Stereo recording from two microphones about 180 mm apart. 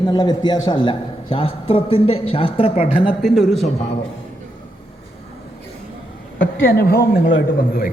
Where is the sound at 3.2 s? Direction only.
Centre (ahead or behind).